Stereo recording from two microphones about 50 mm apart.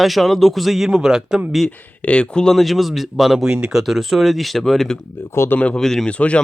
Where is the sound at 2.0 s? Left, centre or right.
Left.